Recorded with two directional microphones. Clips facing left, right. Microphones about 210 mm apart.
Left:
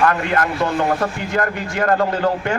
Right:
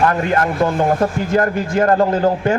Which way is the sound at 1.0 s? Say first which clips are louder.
Right 5 dB; 30° right (ahead or behind).